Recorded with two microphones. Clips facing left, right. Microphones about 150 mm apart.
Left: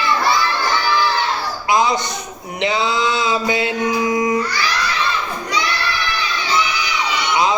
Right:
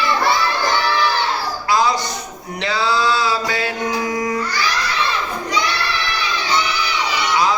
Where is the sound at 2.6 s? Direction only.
20° left (ahead or behind).